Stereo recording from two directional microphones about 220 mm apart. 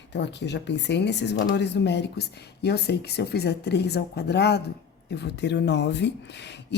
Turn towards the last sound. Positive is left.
turn(degrees=50)  # may be behind; listen again after turning